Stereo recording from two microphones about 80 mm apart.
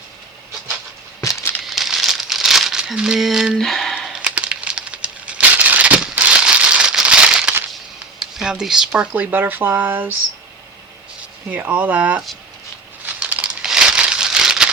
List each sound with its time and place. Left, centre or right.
1.2 s a sound: left
1.6 s crumpling: centre
3.6 s squish: centre
4.2 s a sound: centre
6.1 s crumpling: centre
8.2 s speech: centre; by 10.2 s right
11.5 s speech: right
13.1 s crumpling: centre